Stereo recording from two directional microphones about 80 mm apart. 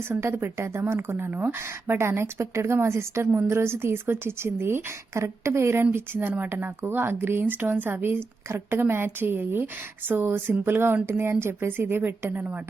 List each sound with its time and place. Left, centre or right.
0.2 s a woman's voice: right